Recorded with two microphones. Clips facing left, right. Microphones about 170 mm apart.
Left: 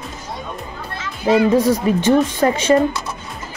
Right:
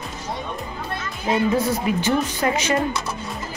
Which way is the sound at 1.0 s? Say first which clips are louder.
Left 7 dB; 90° left.